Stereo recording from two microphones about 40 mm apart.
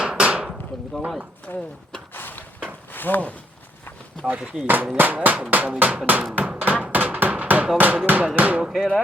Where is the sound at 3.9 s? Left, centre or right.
Left.